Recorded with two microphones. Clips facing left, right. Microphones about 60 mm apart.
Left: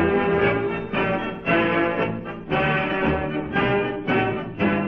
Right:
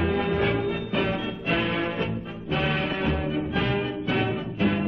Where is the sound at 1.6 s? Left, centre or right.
Left.